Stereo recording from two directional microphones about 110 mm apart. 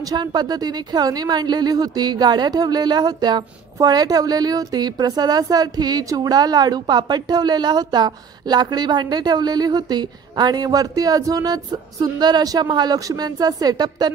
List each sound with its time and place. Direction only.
0.0 s a woman's voice: 40° right (ahead or behind)